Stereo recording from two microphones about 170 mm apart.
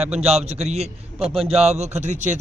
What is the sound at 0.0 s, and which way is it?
A man's voice, 40° right (ahead or behind).